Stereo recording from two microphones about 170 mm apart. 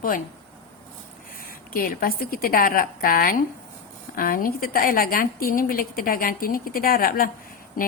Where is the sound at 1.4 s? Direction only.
60° left (ahead or behind).